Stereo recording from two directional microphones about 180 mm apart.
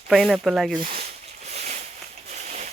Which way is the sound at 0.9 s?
35° right (ahead or behind).